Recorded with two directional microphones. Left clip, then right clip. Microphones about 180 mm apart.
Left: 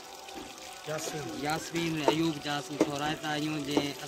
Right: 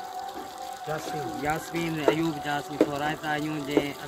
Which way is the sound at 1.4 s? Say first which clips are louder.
Right 2 dB; 15° right (ahead or behind).